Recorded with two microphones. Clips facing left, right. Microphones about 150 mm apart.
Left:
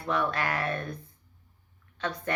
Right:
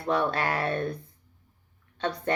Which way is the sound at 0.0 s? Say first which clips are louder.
Right 3 dB; 30° right (ahead or behind).